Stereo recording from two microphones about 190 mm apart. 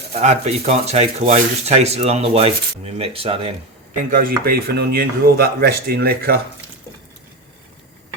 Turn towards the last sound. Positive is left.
turn(degrees=-55)  # may be behind; listen again after turning